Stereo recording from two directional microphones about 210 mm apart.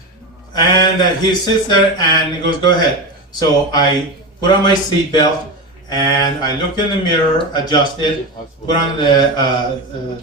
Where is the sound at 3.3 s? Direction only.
20° left (ahead or behind).